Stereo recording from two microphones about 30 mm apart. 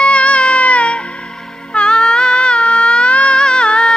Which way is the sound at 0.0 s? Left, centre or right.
Left.